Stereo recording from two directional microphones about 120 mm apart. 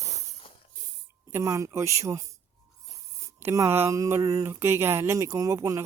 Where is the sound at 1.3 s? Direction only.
25° right (ahead or behind).